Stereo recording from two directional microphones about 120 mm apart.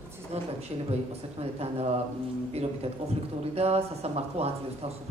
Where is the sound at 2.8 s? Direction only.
55° right (ahead or behind).